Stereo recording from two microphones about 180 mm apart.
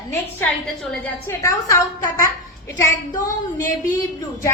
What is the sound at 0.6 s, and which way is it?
Speech, centre (ahead or behind).